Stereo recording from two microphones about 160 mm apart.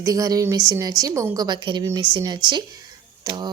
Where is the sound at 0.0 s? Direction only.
20° right (ahead or behind).